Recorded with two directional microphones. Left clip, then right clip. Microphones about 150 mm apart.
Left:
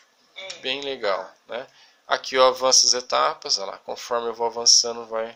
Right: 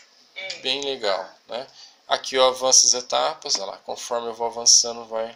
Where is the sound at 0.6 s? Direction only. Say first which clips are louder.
Right 1 dB; 55° left (ahead or behind).